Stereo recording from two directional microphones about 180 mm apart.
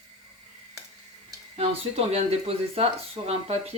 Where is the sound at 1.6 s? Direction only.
35° right (ahead or behind).